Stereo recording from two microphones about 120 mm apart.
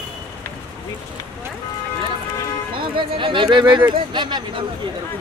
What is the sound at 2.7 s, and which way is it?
Speech, 45° right (ahead or behind).